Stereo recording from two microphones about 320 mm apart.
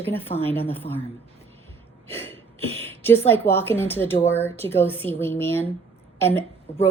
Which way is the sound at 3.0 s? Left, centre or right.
Centre.